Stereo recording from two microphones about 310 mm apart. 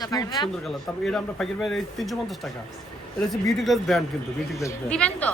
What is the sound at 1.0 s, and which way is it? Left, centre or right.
A woman's voice, centre.